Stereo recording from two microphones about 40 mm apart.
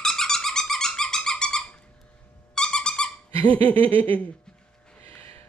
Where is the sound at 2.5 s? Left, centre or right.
Centre.